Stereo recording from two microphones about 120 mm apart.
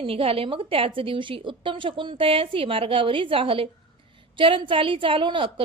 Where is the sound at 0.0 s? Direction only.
50° right (ahead or behind).